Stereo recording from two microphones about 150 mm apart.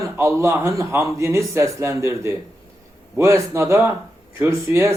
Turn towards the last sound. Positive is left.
turn(degrees=-15)  # may be behind; listen again after turning